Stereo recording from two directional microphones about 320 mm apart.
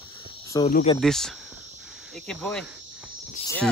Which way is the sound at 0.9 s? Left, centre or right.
Centre.